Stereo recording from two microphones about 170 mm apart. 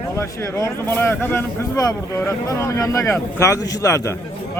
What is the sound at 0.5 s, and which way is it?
Speech, 15° left (ahead or behind).